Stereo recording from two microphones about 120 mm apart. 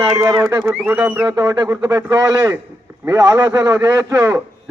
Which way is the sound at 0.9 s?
15° right (ahead or behind).